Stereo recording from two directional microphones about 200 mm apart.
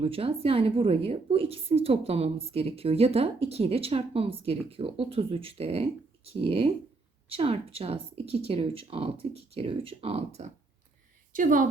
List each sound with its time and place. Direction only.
0.0 s a woman's voice: 30° right (ahead or behind)